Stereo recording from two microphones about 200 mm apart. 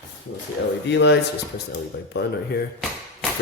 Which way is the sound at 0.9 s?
60° left (ahead or behind).